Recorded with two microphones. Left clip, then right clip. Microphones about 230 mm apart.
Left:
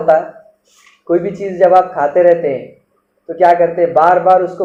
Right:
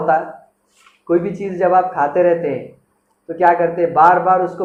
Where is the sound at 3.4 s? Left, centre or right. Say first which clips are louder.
Left 4 dB; right.